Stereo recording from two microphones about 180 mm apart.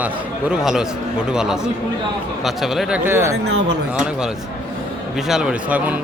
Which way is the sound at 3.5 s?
70° right (ahead or behind).